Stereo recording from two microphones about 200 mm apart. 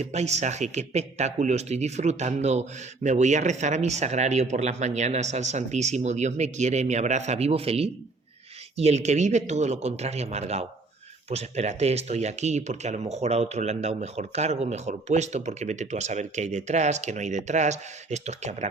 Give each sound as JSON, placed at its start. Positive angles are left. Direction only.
{"t": 0.0, "sound": "a man's voice", "side_deg": -35}